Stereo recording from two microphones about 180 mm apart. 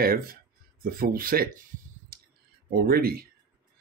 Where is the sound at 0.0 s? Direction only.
55° right (ahead or behind).